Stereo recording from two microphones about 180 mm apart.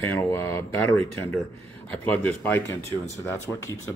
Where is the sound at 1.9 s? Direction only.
10° left (ahead or behind).